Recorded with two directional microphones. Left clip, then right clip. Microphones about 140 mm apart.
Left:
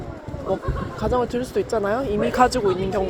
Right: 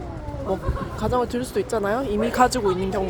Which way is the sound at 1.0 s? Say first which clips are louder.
Left 1 dB; 5° left (ahead or behind).